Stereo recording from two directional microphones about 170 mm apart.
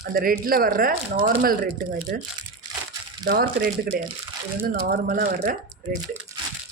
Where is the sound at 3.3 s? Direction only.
60° right (ahead or behind).